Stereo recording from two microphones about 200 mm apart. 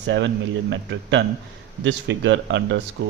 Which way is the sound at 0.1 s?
65° right (ahead or behind).